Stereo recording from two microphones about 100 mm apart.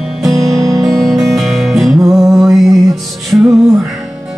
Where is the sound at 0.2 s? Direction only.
35° right (ahead or behind).